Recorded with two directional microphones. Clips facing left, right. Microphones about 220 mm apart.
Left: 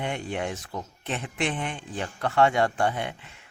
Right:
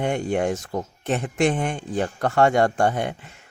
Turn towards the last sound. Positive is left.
turn(degrees=-45)  # may be behind; listen again after turning